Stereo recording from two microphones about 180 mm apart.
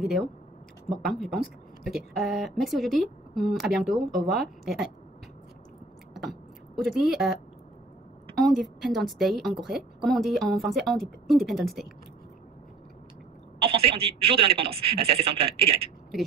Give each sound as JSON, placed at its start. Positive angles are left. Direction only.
{"t": 0.0, "sound": "a woman's voice", "side_deg": 0}
{"t": 6.1, "sound": "a sound", "side_deg": 0}
{"t": 8.4, "sound": "a woman's voice", "side_deg": 0}
{"t": 13.6, "sound": "a man's voice", "side_deg": -30}